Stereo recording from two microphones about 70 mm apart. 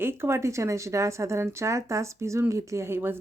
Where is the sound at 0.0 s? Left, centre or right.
Right.